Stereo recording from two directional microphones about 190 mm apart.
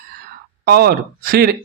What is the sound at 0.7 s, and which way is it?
Speech, 50° right (ahead or behind).